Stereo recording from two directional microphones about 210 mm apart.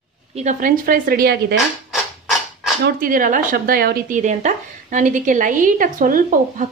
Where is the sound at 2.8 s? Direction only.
40° right (ahead or behind).